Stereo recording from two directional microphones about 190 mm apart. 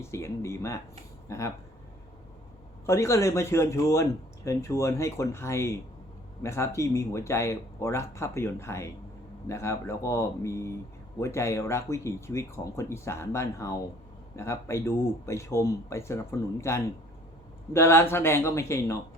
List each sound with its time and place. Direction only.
0.0 s speech: 15° left (ahead or behind)
2.8 s speech: 15° left (ahead or behind)